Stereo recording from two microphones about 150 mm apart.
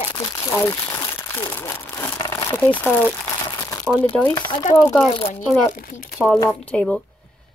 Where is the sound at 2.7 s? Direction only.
10° left (ahead or behind).